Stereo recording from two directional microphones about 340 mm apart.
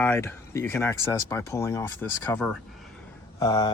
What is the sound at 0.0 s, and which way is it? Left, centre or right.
A man's voice, centre.